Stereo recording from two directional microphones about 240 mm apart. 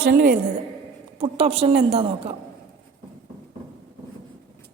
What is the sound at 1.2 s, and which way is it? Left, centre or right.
A woman's voice, right.